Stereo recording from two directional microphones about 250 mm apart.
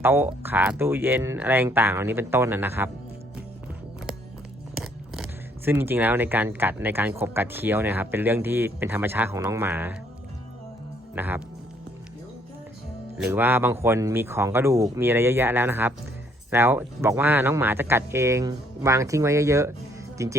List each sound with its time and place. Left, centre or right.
0.0 s speech: centre
4.8 s speech: centre
11.1 s speech: centre
13.1 s speech: centre